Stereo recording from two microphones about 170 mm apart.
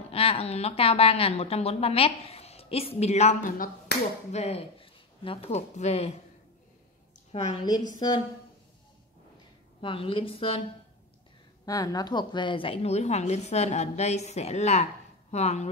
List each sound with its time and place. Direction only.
0.1 s a woman's voice: 35° left (ahead or behind); by 3.7 s 55° left (ahead or behind)
4.3 s speech: 40° left (ahead or behind)
7.3 s a woman's voice: 40° left (ahead or behind)
9.8 s a woman's voice: 30° left (ahead or behind)
11.6 s a woman's voice: 20° left (ahead or behind); by 15.7 s 40° left (ahead or behind)